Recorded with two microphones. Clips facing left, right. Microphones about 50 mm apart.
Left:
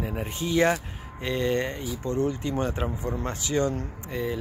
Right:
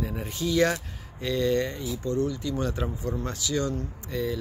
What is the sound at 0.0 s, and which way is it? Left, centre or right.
A man's voice, left.